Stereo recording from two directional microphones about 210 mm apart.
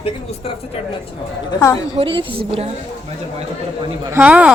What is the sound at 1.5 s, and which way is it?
Speech, 15° left (ahead or behind).